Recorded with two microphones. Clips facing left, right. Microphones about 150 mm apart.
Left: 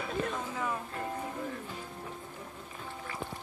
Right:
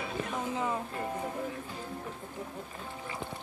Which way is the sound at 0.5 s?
25° right (ahead or behind).